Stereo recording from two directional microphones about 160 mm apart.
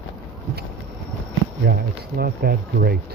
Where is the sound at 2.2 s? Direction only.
75° right (ahead or behind).